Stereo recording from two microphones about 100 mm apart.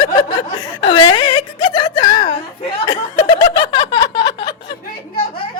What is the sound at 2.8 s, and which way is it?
Chuckle, 50° left (ahead or behind).